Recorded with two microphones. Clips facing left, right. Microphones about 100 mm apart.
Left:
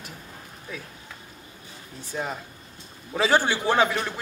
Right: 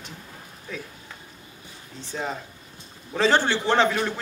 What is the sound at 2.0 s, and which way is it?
A man's voice, 10° left (ahead or behind).